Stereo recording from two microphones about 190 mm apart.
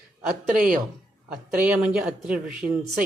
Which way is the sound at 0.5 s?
45° right (ahead or behind).